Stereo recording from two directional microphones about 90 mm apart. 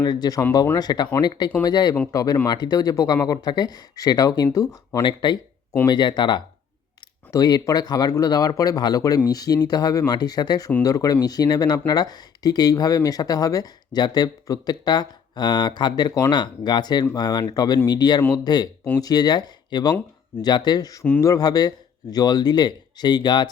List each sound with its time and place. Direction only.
0.0 s speech: 50° left (ahead or behind)
5.0 s speech: 60° left (ahead or behind)
7.3 s speech: 45° left (ahead or behind)